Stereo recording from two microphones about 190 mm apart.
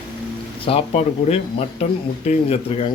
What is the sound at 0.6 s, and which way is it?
Speech, 30° left (ahead or behind).